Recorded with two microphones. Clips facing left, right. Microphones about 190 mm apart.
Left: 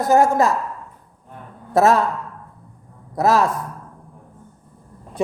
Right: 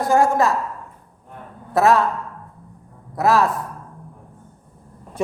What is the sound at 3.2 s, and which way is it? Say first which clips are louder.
Speech: even; 45° left (ahead or behind).